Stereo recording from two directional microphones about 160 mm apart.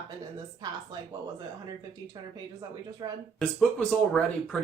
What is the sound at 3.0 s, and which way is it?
Speech, 30° right (ahead or behind).